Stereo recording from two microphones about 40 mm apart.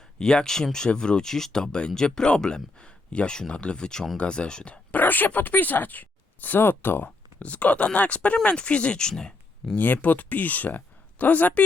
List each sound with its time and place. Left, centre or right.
0.2 s speech: centre
4.9 s speech: left
6.6 s speech: left; by 9.7 s centre
9.7 s speech: left